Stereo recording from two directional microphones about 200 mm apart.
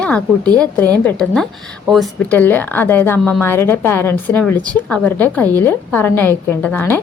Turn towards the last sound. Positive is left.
turn(degrees=10)  # may be behind; listen again after turning